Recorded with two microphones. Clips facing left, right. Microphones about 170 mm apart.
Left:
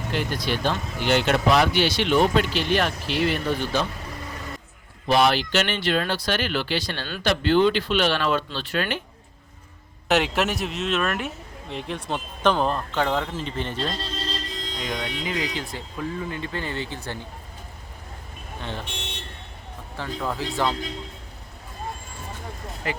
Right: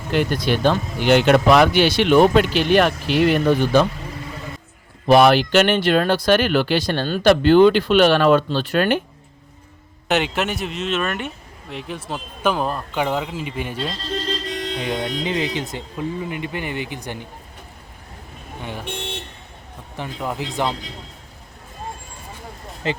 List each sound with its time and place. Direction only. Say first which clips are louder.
0.2 s speech: right 8 dB; 60° right (ahead or behind)
5.0 s speech: right 7 dB; 55° right (ahead or behind)
10.1 s speech: right 1 dB; centre (ahead or behind)
14.4 s vehicle: right 8 dB; 70° right (ahead or behind)
14.8 s speech: right 4 dB; 25° right (ahead or behind)
18.6 s speech: right 2 dB; 10° right (ahead or behind)
20.0 s speech: right 2 dB; 20° right (ahead or behind)
22.8 s speech: right 5 dB; 25° right (ahead or behind)